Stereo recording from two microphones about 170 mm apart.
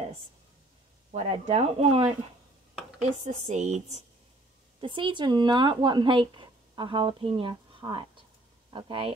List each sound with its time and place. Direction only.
1.1 s speech: 40° right (ahead or behind)
4.7 s speech: 30° right (ahead or behind)